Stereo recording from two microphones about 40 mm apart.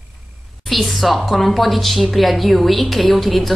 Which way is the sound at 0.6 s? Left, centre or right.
Centre.